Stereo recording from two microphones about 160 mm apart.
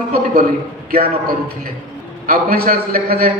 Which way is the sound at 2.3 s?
70° right (ahead or behind).